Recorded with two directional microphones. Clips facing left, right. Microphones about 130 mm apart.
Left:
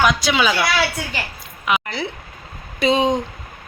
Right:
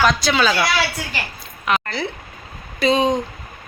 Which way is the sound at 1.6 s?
15° left (ahead or behind).